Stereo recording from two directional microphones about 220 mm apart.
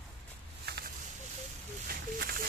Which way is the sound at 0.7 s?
45° right (ahead or behind).